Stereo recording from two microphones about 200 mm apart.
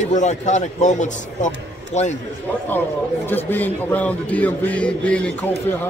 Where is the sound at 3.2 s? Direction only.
10° left (ahead or behind).